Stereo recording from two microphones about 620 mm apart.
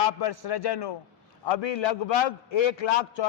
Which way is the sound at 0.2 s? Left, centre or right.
Left.